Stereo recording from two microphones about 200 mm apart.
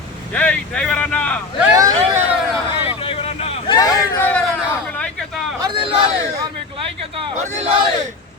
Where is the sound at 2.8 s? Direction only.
25° left (ahead or behind).